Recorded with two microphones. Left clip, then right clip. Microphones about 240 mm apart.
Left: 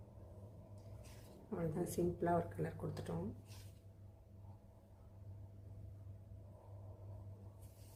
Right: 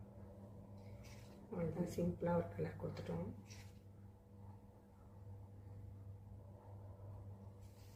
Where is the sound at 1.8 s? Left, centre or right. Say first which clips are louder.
Left 4 dB; left.